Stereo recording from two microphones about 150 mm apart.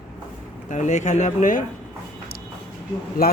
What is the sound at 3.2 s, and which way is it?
Speech, 85° left.